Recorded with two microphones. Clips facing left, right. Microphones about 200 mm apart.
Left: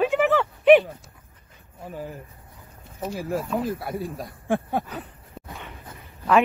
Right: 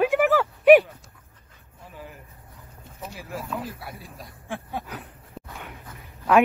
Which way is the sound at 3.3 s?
45° left (ahead or behind).